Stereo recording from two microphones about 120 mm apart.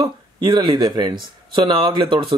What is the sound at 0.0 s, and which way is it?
Speech, 40° right (ahead or behind).